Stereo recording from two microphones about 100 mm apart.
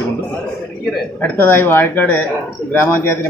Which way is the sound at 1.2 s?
20° left (ahead or behind).